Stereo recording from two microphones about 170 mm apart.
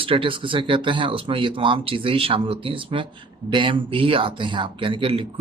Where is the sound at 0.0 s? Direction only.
30° right (ahead or behind).